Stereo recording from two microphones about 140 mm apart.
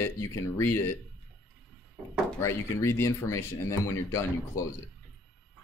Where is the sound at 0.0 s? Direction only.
20° left (ahead or behind).